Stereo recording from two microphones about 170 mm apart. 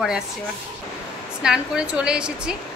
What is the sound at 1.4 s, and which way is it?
A woman's voice, 5° right (ahead or behind).